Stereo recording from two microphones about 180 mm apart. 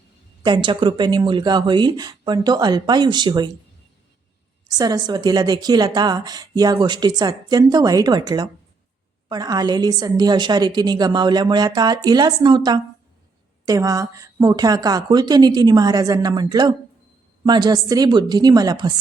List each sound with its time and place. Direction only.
0.4 s a woman's voice: 25° right (ahead or behind)
4.7 s a woman's voice: 20° right (ahead or behind)